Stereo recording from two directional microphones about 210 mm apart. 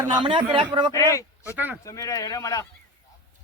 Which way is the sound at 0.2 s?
25° right (ahead or behind).